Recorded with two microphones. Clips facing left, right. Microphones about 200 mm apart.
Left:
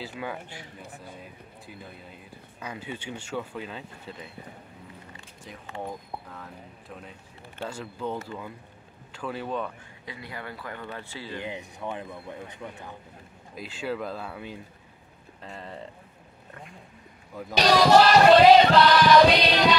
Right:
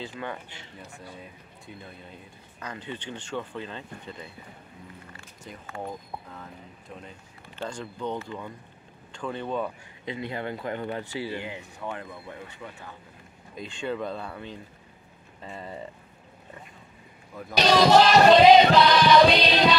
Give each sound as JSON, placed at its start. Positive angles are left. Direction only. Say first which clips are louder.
{"t": 0.0, "sound": "speech", "louder": "even", "side_deg": 5}
{"t": 2.6, "sound": "choir", "louder": "even", "side_deg": 10}
{"t": 5.8, "sound": "speech", "louder": "even", "side_deg": 0}
{"t": 8.3, "sound": "choir", "louder": "right 1 dB", "side_deg": 5}
{"t": 9.1, "sound": "speech", "louder": "right 1 dB", "side_deg": 5}
{"t": 10.0, "sound": "speech", "louder": "right 7 dB", "side_deg": -25}
{"t": 11.4, "sound": "choir", "louder": "left 1 dB", "side_deg": 15}
{"t": 13.6, "sound": "speech", "louder": "right 1 dB", "side_deg": 5}
{"t": 15.4, "sound": "speech", "louder": "right 2 dB", "side_deg": -5}
{"t": 17.4, "sound": "choir", "louder": "even", "side_deg": 10}